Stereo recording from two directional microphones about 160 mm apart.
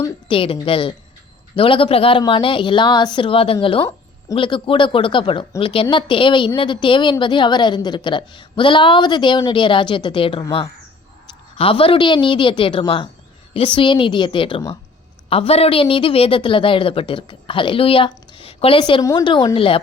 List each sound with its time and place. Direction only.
0.3 s a woman's voice: 35° left (ahead or behind)
11.5 s a woman's voice: 35° left (ahead or behind)